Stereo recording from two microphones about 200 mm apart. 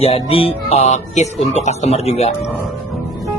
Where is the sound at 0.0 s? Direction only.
30° left (ahead or behind).